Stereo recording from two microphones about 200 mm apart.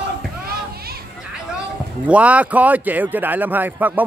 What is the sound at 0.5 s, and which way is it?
Children playing, 50° right (ahead or behind).